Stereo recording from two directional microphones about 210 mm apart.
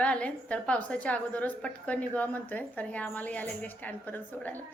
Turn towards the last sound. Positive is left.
turn(degrees=10)  # may be behind; listen again after turning